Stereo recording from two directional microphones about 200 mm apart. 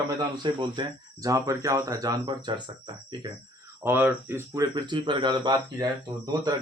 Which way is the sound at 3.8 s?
10° right (ahead or behind).